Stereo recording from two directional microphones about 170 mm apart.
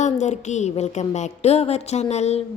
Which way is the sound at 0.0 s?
45° left (ahead or behind).